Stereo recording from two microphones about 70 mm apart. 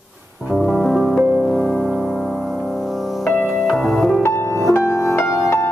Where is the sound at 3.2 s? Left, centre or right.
Left.